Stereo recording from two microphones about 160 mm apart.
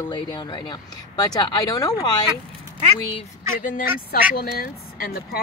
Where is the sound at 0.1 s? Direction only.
30° left (ahead or behind).